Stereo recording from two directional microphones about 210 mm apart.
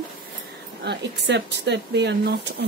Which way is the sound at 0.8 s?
55° right (ahead or behind).